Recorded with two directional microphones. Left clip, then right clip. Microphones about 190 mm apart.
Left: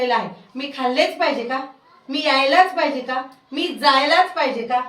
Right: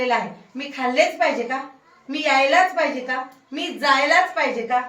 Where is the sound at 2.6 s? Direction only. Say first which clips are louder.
Left 3 dB; centre (ahead or behind).